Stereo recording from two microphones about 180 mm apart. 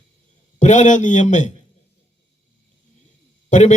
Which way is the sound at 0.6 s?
40° left (ahead or behind).